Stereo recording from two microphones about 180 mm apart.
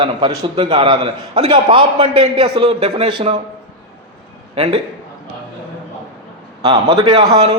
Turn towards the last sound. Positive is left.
turn(degrees=-20)  # may be behind; listen again after turning